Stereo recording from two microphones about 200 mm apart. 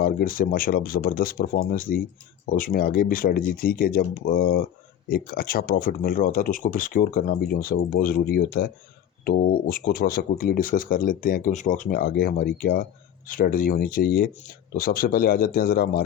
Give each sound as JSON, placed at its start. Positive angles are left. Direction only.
{"t": 0.0, "sound": "speech", "side_deg": 45}